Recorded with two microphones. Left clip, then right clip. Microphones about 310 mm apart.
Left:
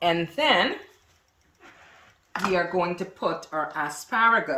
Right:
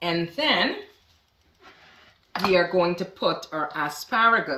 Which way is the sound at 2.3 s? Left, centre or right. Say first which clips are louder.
Right 3 dB; centre.